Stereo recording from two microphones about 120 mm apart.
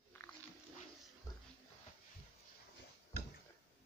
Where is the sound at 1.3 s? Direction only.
30° left (ahead or behind).